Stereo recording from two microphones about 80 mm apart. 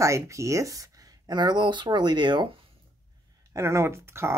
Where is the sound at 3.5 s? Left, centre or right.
Right.